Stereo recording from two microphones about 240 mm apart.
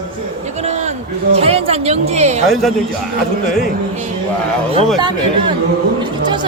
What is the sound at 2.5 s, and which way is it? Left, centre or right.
Speech, centre.